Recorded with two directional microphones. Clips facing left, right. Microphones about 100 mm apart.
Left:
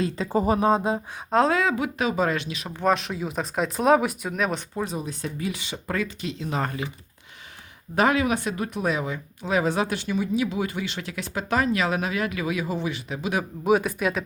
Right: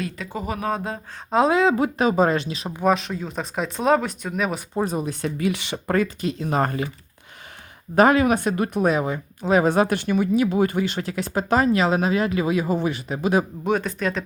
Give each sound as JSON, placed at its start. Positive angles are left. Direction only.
{"t": 0.0, "sound": "speech", "side_deg": 30}
{"t": 1.5, "sound": "speech", "side_deg": -20}
{"t": 1.7, "sound": "speech", "side_deg": -40}
{"t": 2.7, "sound": "speech", "side_deg": 0}
{"t": 4.9, "sound": "speech", "side_deg": -55}
{"t": 5.9, "sound": "speech", "side_deg": -45}
{"t": 7.9, "sound": "speech", "side_deg": -45}
{"t": 13.7, "sound": "speech", "side_deg": 5}